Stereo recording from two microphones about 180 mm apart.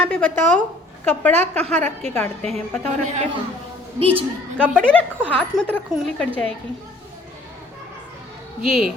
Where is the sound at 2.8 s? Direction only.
40° right (ahead or behind).